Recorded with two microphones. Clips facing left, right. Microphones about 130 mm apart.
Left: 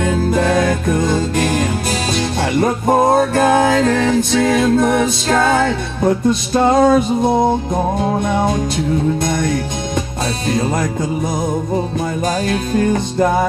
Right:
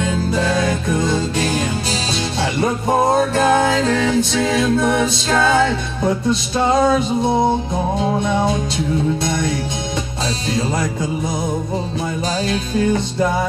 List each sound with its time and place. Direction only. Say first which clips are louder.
0.3 s music: left 4 dB; 50° left (ahead or behind)
9.2 s music: left 2 dB; 50° left (ahead or behind)
10.5 s music: left 3 dB; 50° left (ahead or behind)
12.7 s music: left 2 dB; 50° left (ahead or behind)